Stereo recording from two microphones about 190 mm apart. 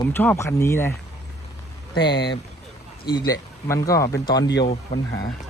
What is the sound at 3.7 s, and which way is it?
Speech, 15° left (ahead or behind).